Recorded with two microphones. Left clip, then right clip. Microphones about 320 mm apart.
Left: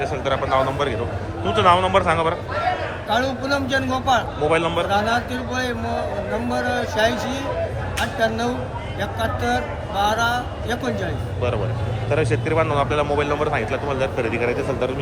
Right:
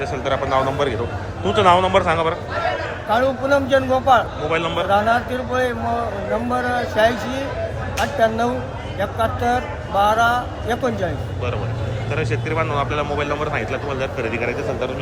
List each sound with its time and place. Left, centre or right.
0.1 s a man's voice: centre
12.1 s speech: centre